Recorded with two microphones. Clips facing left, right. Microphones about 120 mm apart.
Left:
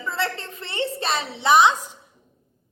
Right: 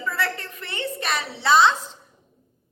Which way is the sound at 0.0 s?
25° left (ahead or behind).